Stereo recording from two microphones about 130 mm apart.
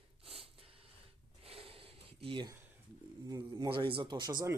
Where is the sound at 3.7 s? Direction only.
40° right (ahead or behind).